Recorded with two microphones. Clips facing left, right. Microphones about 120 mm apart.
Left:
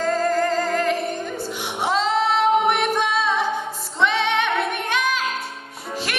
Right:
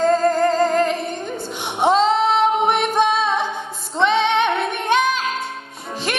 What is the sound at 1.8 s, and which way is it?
Music, 25° right (ahead or behind).